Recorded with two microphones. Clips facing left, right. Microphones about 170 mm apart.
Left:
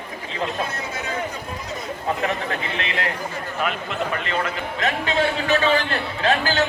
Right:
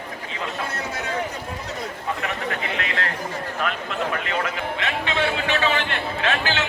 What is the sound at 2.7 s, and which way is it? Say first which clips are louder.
Speech: left 1 dB; 25° left (ahead or behind).